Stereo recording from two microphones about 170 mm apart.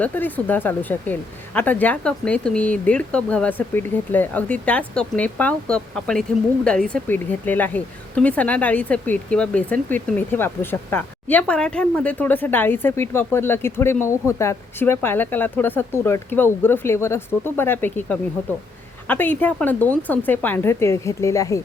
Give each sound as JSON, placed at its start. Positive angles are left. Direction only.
{"t": 0.0, "sound": "speech", "side_deg": 10}